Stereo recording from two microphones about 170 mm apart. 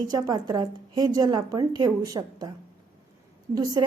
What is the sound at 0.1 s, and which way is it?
A woman's voice, 20° right (ahead or behind).